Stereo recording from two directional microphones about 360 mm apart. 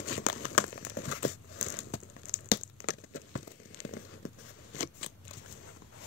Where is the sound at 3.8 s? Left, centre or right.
Left.